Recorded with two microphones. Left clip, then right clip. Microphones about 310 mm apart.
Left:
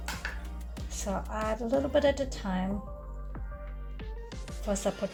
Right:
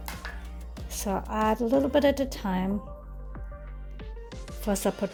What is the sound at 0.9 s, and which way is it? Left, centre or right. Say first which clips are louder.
Speech: right 5 dB; right.